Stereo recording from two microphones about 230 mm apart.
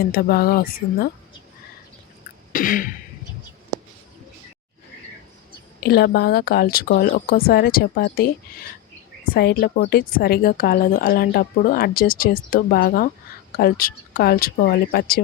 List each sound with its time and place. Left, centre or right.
0.1 s speech: left
2.5 s cough: left
5.8 s speech: left